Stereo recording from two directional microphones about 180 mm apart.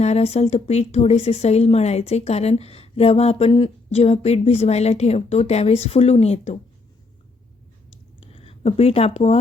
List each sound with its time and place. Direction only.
0.0 s speech: 35° left (ahead or behind)
8.2 s speech: 35° left (ahead or behind)